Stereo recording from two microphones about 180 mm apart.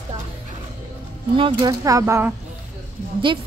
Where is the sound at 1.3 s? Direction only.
30° right (ahead or behind).